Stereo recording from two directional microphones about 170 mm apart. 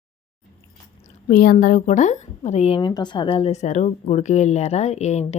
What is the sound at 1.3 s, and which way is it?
A woman's voice, 60° left (ahead or behind).